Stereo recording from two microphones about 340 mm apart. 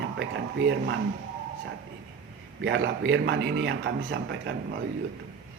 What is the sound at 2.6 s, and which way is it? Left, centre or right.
A man's voice, right.